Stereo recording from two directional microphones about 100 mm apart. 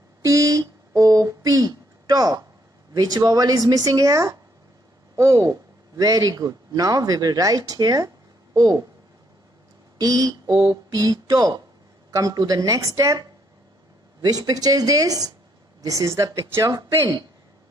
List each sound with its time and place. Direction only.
0.2 s a sound: 30° right (ahead or behind)
2.9 s speech: 40° right (ahead or behind)
9.9 s speech: 35° right (ahead or behind)
14.3 s speech: 40° right (ahead or behind)